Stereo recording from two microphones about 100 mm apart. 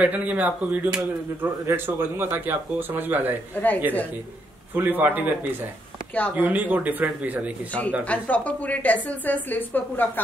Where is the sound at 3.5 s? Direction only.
15° left (ahead or behind).